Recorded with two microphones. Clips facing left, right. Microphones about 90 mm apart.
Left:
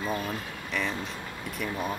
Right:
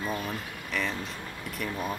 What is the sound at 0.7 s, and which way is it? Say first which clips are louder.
Speech: even; centre (ahead or behind).